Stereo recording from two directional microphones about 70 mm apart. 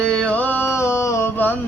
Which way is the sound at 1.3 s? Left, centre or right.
Left.